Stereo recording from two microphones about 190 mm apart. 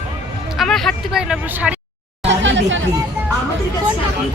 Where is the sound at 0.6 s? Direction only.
Centre (ahead or behind).